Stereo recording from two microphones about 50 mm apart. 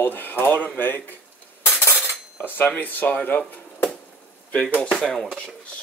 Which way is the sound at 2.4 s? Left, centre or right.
Left.